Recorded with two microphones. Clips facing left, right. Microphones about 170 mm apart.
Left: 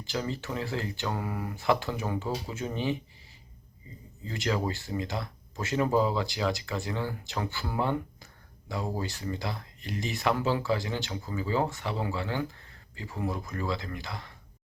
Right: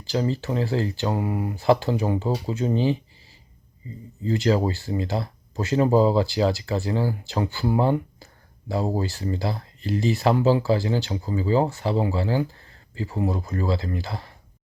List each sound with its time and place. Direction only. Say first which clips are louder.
0.0 s speech: right 8 dB; 30° right (ahead or behind)
1.1 s speech: right 8 dB; 20° right (ahead or behind)
4.2 s speech: right 9 dB; 35° right (ahead or behind)